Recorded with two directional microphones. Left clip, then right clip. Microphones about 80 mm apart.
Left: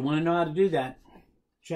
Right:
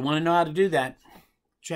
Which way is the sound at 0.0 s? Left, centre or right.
Right.